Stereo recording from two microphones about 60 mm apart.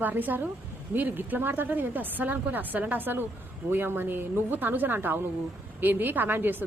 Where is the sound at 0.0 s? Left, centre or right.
Right.